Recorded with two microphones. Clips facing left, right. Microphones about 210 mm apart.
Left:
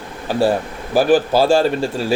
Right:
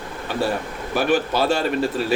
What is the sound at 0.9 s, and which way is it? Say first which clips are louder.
Speech: left 6 dB; 30° left (ahead or behind).